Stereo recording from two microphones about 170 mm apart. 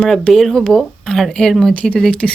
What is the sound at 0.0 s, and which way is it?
Speech, centre (ahead or behind).